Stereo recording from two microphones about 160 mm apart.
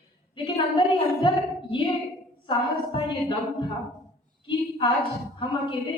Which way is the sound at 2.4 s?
30° left (ahead or behind).